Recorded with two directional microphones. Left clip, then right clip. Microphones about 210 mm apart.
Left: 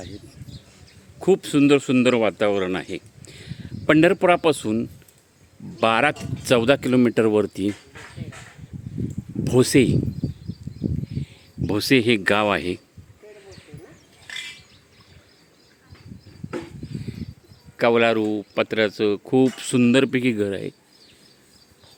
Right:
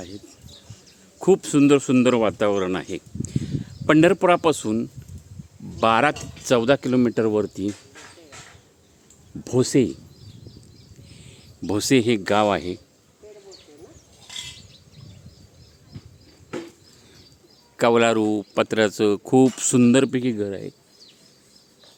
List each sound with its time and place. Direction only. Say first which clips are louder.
1.2 s speech: right 1 dB; 10° right (ahead or behind); by 7.7 s 10° left (ahead or behind)
7.7 s a sound: left 3 dB; 40° left (ahead or behind)
9.4 s speech: left 3 dB; 10° left (ahead or behind)
11.1 s speech: left 9 dB; 10° right (ahead or behind)
17.7 s speech: even; 15° right (ahead or behind); by 20.7 s 10° left (ahead or behind)